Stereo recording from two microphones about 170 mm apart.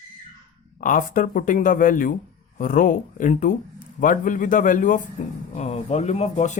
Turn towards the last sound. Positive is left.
turn(degrees=45)  # may be behind; listen again after turning